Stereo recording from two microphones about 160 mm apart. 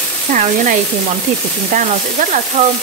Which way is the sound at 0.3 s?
55° right (ahead or behind).